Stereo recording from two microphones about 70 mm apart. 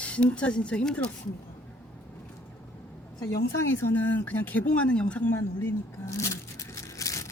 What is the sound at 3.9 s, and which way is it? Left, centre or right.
Speech, left.